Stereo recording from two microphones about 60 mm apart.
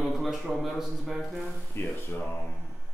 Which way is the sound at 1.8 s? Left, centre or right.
Left.